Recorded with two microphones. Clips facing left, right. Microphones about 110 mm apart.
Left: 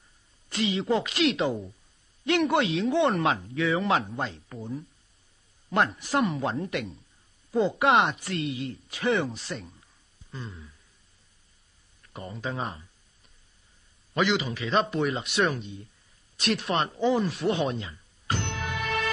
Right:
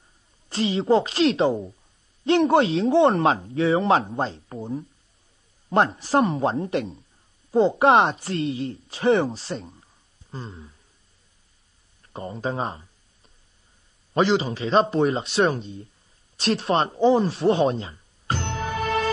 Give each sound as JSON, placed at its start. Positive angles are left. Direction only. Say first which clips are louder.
{"t": 0.5, "sound": "speech", "louder": "right 6 dB", "side_deg": -30}
{"t": 12.0, "sound": "speech", "louder": "right 6 dB", "side_deg": -30}
{"t": 14.1, "sound": "speech", "louder": "right 5 dB", "side_deg": -35}
{"t": 16.3, "sound": "a sound", "louder": "right 5 dB", "side_deg": -30}